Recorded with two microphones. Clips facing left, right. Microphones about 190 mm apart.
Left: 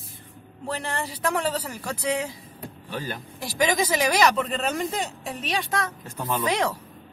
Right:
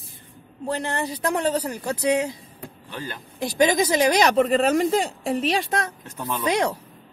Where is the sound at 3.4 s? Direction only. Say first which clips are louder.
Right 4 dB; 20° right (ahead or behind).